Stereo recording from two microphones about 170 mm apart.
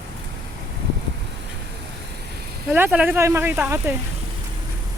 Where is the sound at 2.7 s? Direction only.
10° right (ahead or behind).